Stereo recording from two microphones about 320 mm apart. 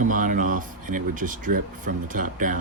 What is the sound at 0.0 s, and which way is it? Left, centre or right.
Speech, right.